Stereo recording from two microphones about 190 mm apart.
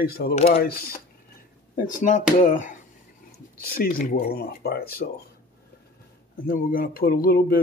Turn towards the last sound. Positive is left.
turn(degrees=50)  # may be behind; listen again after turning